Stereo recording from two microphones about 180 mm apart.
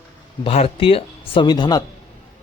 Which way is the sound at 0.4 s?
35° left (ahead or behind).